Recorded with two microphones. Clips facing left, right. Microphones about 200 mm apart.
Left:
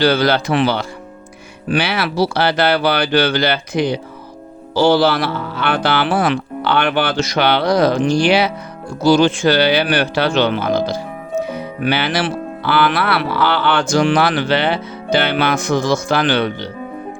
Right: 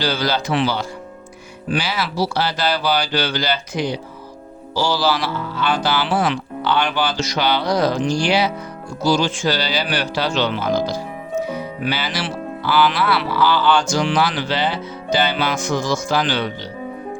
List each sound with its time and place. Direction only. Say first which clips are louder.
0.0 s speech: left 7 dB; 60° left (ahead or behind)